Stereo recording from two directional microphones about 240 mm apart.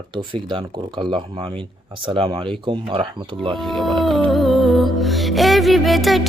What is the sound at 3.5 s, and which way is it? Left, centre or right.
Music, centre.